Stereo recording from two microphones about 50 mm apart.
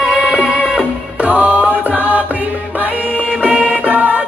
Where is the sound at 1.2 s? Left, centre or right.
Right.